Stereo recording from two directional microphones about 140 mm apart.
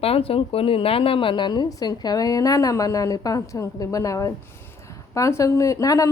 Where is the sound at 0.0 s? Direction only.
45° left (ahead or behind).